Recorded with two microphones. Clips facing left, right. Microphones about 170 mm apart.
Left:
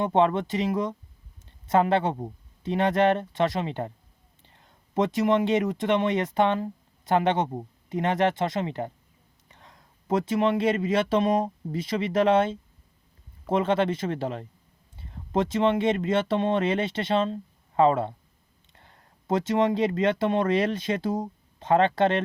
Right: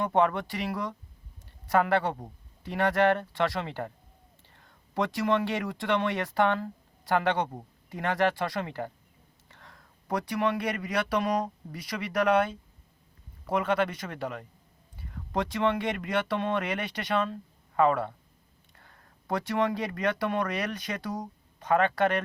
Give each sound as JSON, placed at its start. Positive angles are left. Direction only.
{"t": 0.0, "sound": "speech", "side_deg": 25}